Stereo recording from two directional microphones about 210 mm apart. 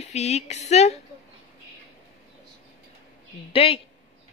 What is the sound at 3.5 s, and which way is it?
Speech, 30° left (ahead or behind).